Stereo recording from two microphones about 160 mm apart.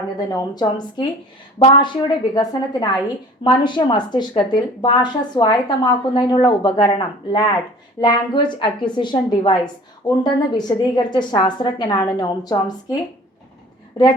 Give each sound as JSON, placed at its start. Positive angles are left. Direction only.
{"t": 0.3, "sound": "speech", "side_deg": 25}